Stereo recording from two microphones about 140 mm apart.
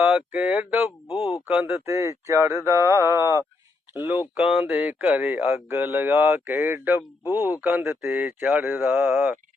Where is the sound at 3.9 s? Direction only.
15° right (ahead or behind).